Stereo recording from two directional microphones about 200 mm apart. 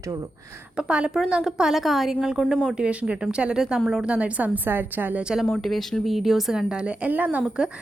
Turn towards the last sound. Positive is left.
turn(degrees=-5)  # may be behind; listen again after turning